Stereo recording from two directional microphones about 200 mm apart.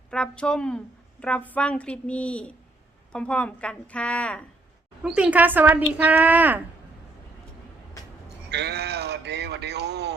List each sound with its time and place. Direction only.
0.1 s a woman's voice: 5° left (ahead or behind)
5.0 s speech: 5° right (ahead or behind)
8.4 s speech: 55° right (ahead or behind)